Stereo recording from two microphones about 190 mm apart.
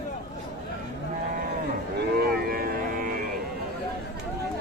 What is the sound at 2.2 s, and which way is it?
Music, 50° right (ahead or behind).